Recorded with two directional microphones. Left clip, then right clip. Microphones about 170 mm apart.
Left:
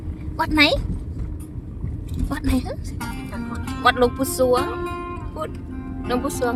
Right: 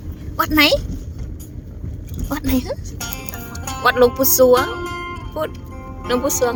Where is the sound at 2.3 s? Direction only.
10° right (ahead or behind).